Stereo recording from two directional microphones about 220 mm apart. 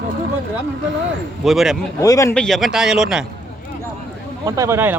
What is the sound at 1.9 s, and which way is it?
Speech, 15° left (ahead or behind).